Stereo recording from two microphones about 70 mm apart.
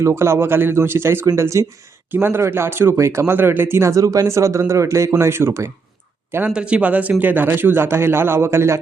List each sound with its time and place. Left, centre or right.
0.0 s a man's voice: right
2.0 s a man's voice: right
2.9 s a man's voice: right
6.5 s a man's voice: centre; by 8.8 s right